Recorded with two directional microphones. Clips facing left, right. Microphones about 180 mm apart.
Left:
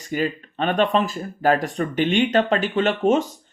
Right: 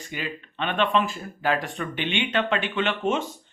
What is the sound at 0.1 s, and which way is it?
Speech, 40° left (ahead or behind).